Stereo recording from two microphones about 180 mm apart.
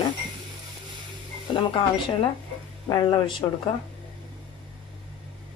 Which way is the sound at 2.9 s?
25° left (ahead or behind).